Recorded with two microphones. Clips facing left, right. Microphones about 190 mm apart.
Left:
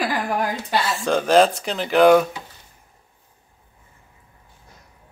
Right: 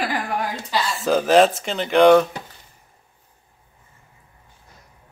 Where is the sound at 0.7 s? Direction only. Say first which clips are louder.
Left 1 dB; 55° left (ahead or behind).